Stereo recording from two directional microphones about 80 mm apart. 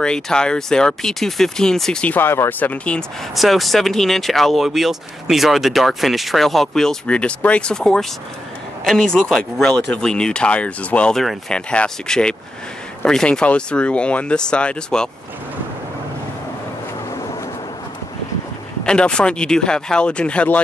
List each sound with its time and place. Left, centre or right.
0.0 s speech: centre
2.1 s speech: left
2.7 s speech: centre
3.3 s speech: centre
18.9 s speech: centre